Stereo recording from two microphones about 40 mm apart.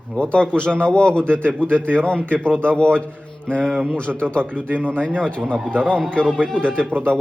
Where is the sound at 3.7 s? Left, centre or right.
Centre.